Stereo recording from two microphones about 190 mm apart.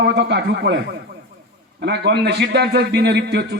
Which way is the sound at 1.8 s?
60° right (ahead or behind).